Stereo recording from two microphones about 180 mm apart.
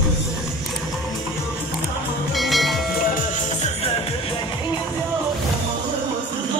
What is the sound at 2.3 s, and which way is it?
Music, centre (ahead or behind).